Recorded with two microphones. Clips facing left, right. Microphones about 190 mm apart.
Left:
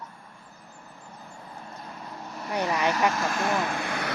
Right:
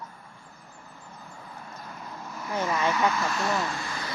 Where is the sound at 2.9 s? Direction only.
40° left (ahead or behind); by 4.1 s 60° left (ahead or behind).